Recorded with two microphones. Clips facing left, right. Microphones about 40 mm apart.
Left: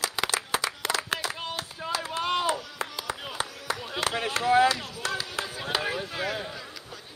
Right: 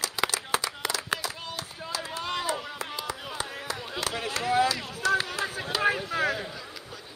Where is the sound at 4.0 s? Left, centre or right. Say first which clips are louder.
Left 3 dB; left.